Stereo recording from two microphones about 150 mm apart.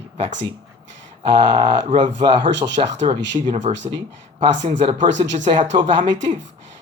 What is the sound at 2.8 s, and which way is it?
Speech, 40° right (ahead or behind).